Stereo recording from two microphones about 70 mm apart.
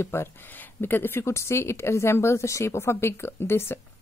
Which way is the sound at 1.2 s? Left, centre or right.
Left.